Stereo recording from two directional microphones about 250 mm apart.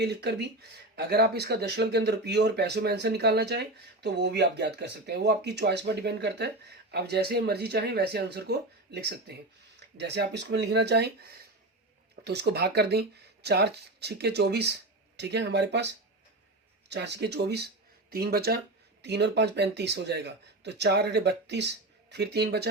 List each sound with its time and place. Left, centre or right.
0.0 s speech: right
16.9 s speech: right